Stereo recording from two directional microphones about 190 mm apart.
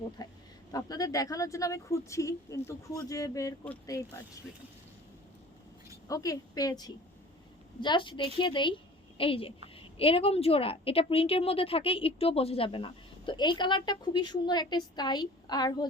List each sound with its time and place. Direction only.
0.2 s a woman's voice: 20° left (ahead or behind)
6.1 s a woman's voice: 20° left (ahead or behind)